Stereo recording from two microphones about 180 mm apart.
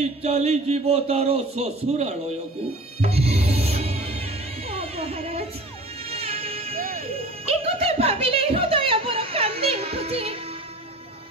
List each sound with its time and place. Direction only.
0.0 s speech: 35° right (ahead or behind)
3.0 s music: 35° right (ahead or behind)
6.8 s music: 50° right (ahead or behind)
7.2 s music: 35° right (ahead or behind)